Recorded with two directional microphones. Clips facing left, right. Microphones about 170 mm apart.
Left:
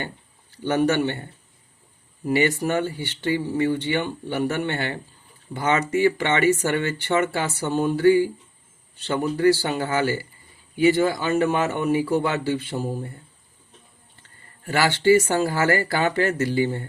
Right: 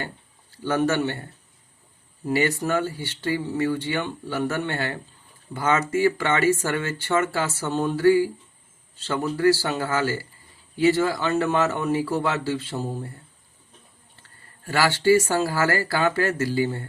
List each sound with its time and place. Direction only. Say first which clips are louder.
0.5 s speech: left 2 dB; 15° left (ahead or behind)
2.2 s speech: left 2 dB; 15° left (ahead or behind)
14.7 s speech: left 1 dB; 20° left (ahead or behind)